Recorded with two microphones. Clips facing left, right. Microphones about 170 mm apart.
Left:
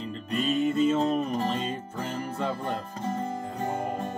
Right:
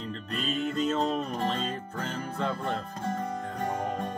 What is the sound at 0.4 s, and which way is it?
Music, 10° left (ahead or behind).